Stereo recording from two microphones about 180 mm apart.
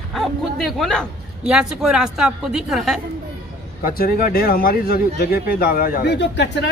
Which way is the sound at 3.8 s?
55° left (ahead or behind).